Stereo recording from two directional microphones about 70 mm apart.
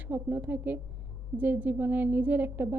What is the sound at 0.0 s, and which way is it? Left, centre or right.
A woman's voice, right.